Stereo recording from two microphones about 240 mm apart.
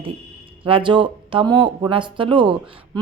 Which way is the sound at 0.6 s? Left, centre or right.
Right.